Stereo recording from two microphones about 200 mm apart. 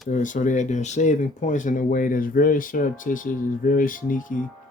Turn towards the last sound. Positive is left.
turn(degrees=40)  # may be behind; listen again after turning